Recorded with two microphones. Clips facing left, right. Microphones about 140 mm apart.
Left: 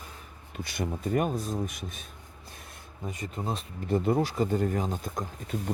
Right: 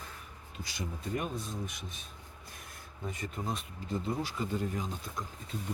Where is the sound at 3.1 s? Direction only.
20° left (ahead or behind).